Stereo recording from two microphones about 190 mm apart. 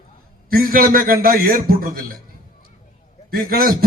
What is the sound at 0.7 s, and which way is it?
A man's voice, 50° right (ahead or behind).